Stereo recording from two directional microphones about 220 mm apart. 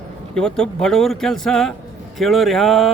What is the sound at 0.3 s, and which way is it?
Speech, 5° left (ahead or behind).